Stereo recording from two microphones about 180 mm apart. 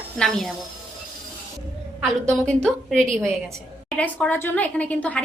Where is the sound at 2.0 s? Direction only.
5° left (ahead or behind).